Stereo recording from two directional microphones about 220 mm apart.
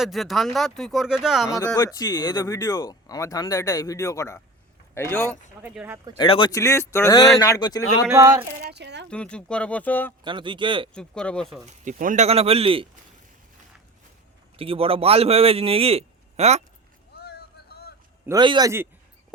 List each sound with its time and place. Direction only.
0.0 s speech: centre (ahead or behind)
1.5 s speech: 15° left (ahead or behind)
5.6 s a man's voice: 5° right (ahead or behind)
6.1 s speech: 20° left (ahead or behind)
8.0 s a man's voice: 10° right (ahead or behind)
8.7 s speech: 50° right (ahead or behind)
9.0 s speech: 5° left (ahead or behind)
10.2 s a man's voice: 20° right (ahead or behind)
10.9 s speech: 5° left (ahead or behind)
11.6 s a man's voice: 35° right (ahead or behind)
14.5 s a man's voice: 25° right (ahead or behind)
17.2 s vehicle: 45° left (ahead or behind)
18.3 s a man's voice: 20° right (ahead or behind)